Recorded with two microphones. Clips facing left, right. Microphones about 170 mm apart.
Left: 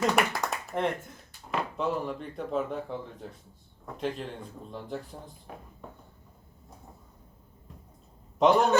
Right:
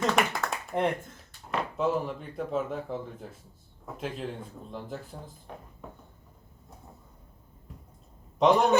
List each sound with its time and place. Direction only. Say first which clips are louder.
0.0 s a sound: even; centre (ahead or behind)
0.7 s speech: right 2 dB; 15° right (ahead or behind)
1.5 s speech: right 2 dB; centre (ahead or behind)
8.4 s speech: even; centre (ahead or behind)